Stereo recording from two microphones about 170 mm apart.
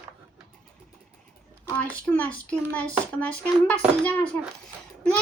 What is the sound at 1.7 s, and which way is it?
Speech, 10° left (ahead or behind).